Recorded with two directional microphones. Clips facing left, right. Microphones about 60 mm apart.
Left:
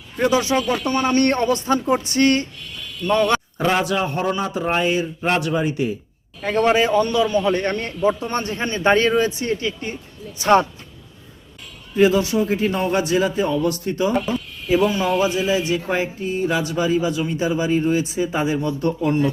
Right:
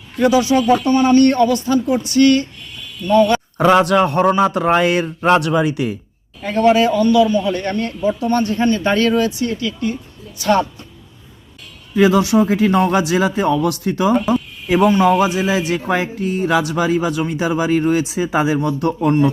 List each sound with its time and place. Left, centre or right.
0.5 s a man's voice: left
0.9 s a sound: left
3.1 s a man's voice: left
3.6 s speech: right
6.4 s a man's voice: left
11.9 s speech: right
14.8 s a man's voice: right
15.4 s speech: right
19.0 s a man's voice: right